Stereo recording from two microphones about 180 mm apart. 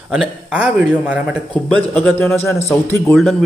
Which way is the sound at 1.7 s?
5° left (ahead or behind).